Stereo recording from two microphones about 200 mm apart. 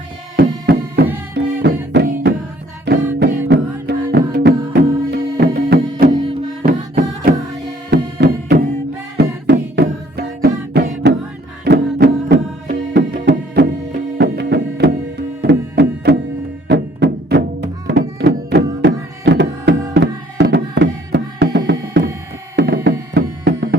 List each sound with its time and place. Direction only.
0.6 s music: 55° right (ahead or behind)
7.9 s music: 55° right (ahead or behind)